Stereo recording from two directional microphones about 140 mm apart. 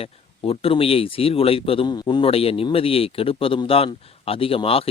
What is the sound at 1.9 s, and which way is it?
Speech, 30° left (ahead or behind).